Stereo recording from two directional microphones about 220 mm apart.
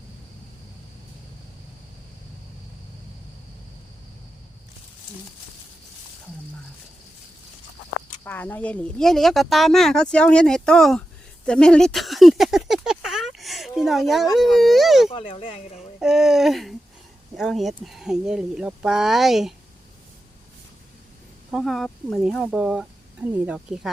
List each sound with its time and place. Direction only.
8.2 s speech: 10° left (ahead or behind)
11.4 s a sound: 5° left (ahead or behind)
14.3 s speech: centre (ahead or behind)
15.1 s speech: 25° left (ahead or behind)
16.0 s speech: centre (ahead or behind)
21.5 s speech: centre (ahead or behind)